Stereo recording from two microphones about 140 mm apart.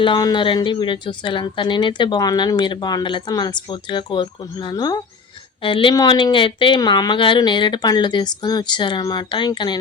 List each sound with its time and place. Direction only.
0.0 s a woman's voice: 30° left (ahead or behind)